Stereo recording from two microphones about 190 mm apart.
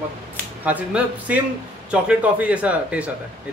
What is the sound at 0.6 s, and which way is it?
A man's voice, 10° right (ahead or behind).